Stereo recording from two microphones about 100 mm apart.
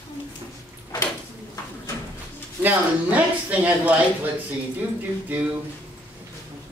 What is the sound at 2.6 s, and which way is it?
A man's voice, 15° right (ahead or behind).